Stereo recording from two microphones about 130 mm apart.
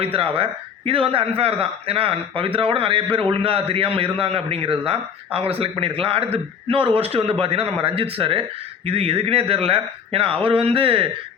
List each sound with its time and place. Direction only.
0.0 s speech: 45° right (ahead or behind)